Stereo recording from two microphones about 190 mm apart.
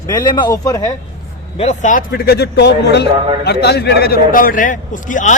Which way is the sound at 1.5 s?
40° left (ahead or behind).